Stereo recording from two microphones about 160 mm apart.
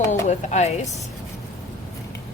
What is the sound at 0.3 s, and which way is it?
Speech, 45° left (ahead or behind).